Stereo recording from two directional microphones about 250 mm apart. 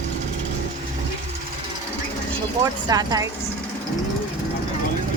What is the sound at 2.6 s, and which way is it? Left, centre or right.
Speech, centre.